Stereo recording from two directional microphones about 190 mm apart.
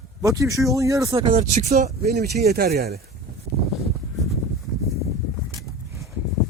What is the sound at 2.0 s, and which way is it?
Speech, 55° right (ahead or behind).